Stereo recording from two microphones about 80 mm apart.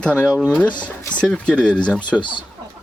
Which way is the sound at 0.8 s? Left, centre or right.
Centre.